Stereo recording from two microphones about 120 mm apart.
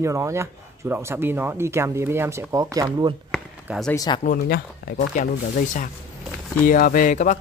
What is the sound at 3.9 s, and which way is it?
Speech, 35° left (ahead or behind).